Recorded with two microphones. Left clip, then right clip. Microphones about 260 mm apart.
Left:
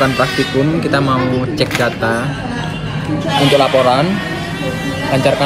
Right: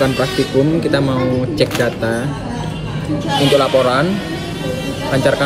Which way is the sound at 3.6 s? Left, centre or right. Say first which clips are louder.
Left 2 dB; left.